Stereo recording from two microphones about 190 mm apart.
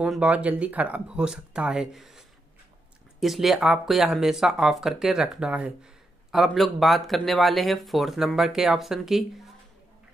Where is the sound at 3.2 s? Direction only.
Centre (ahead or behind).